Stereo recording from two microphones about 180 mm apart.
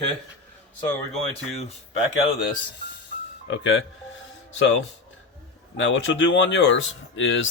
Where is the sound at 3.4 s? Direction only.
90° left.